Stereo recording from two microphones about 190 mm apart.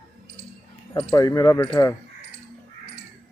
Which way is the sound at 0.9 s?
20° left (ahead or behind).